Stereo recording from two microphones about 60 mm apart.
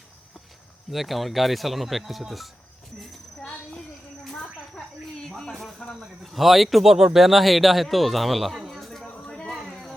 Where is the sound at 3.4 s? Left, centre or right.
Centre.